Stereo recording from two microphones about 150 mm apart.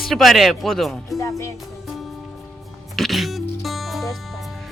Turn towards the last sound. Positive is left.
turn(degrees=0)  # may be behind; listen again after turning